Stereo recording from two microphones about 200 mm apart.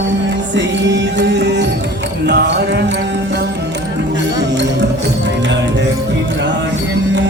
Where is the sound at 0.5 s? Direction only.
60° right (ahead or behind).